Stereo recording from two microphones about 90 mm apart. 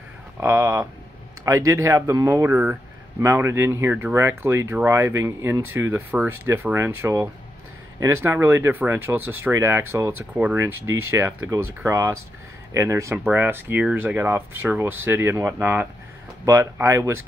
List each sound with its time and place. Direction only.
0.4 s speech: 30° right (ahead or behind)
10.3 s speech: 15° right (ahead or behind)
10.6 s speech: 30° right (ahead or behind)